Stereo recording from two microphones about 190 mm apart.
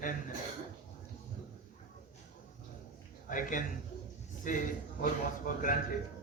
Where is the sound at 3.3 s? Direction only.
45° left (ahead or behind).